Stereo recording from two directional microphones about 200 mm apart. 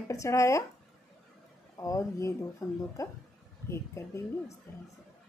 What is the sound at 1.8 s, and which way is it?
A woman's voice, 15° left (ahead or behind).